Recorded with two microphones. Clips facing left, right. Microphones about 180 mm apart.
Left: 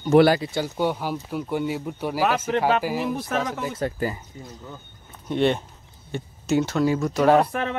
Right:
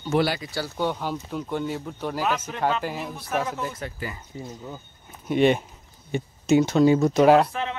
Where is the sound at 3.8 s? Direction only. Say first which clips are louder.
Left 8 dB; 45° left (ahead or behind).